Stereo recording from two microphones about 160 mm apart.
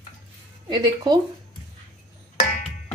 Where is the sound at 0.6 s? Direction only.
25° right (ahead or behind).